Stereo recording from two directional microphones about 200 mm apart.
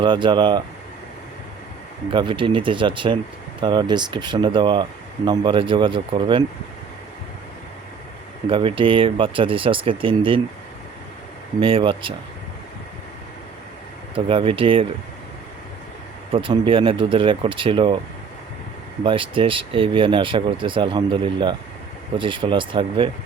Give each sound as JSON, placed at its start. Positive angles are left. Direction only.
{"t": 0.0, "sound": "speech", "side_deg": -25}
{"t": 2.1, "sound": "speech", "side_deg": -25}
{"t": 8.4, "sound": "speech", "side_deg": -25}
{"t": 11.6, "sound": "speech", "side_deg": -25}
{"t": 14.3, "sound": "speech", "side_deg": -25}
{"t": 16.3, "sound": "speech", "side_deg": -25}
{"t": 19.0, "sound": "speech", "side_deg": -25}